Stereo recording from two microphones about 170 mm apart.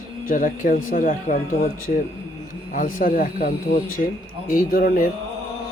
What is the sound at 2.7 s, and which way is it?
Speech, 55° left (ahead or behind).